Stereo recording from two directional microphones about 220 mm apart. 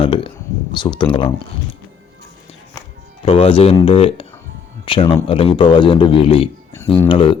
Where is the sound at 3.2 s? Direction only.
25° left (ahead or behind).